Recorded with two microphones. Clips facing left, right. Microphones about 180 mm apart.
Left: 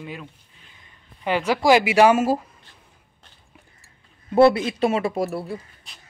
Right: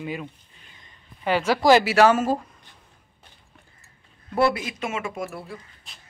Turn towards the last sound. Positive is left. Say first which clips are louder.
# left 1 dB
turn(degrees=0)  # may be behind; listen again after turning